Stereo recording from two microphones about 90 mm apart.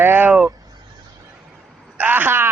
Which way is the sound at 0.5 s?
45° right (ahead or behind).